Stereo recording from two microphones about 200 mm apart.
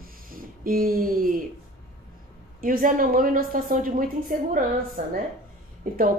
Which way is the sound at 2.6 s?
45° right (ahead or behind).